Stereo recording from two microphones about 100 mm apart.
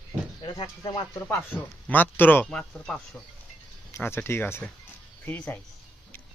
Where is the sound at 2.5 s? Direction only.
5° left (ahead or behind).